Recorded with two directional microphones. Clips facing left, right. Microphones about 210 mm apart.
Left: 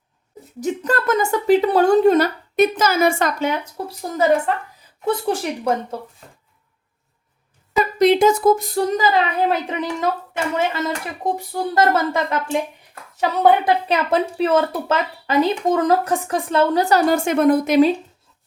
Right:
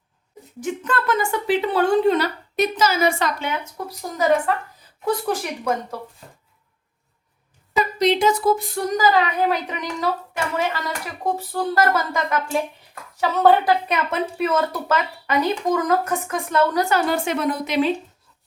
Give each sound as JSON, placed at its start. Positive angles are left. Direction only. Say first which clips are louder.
{"t": 0.6, "sound": "speech", "louder": "left 3 dB", "side_deg": 40}
{"t": 3.8, "sound": "speech", "louder": "left 3 dB", "side_deg": 30}
{"t": 5.0, "sound": "speech", "louder": "left 2 dB", "side_deg": 25}
{"t": 7.9, "sound": "speech", "louder": "left 5 dB", "side_deg": 55}
{"t": 11.8, "sound": "speech", "louder": "left 4 dB", "side_deg": 25}
{"t": 13.1, "sound": "speech", "louder": "left 1 dB", "side_deg": 15}
{"t": 13.8, "sound": "speech", "louder": "left 4 dB", "side_deg": 30}